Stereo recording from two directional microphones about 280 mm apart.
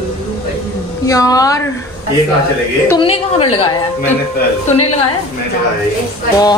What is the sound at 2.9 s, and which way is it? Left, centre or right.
Speech, centre.